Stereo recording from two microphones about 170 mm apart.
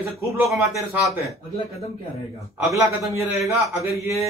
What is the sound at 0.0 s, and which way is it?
Speech, 15° right (ahead or behind).